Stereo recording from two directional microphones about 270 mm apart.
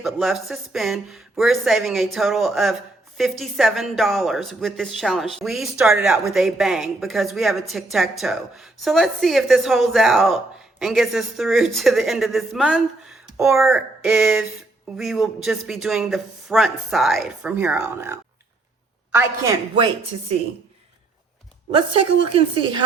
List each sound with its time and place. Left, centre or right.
0.0 s a woman's voice: centre
21.8 s a woman's voice: centre